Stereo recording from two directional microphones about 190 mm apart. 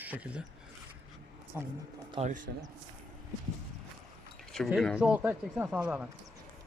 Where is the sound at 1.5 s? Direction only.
15° right (ahead or behind).